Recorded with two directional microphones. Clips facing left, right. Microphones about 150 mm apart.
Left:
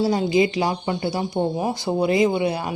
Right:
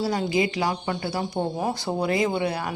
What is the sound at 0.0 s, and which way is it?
Speech, 20° left (ahead or behind).